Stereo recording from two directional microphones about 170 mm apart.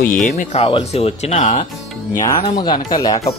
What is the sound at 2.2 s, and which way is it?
Speech, 25° left (ahead or behind).